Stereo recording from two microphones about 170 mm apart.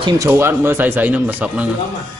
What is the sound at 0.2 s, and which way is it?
Speech, 15° right (ahead or behind).